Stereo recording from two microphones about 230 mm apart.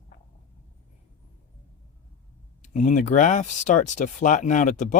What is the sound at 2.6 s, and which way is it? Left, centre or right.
Speech, left.